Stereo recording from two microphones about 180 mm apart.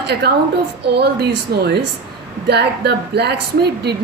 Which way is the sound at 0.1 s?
65° right (ahead or behind).